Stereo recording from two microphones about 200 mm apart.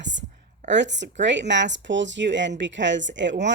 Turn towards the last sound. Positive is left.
turn(degrees=-65)  # may be behind; listen again after turning